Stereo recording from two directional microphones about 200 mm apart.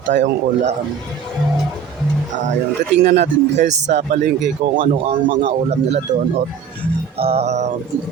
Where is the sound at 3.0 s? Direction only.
60° right (ahead or behind).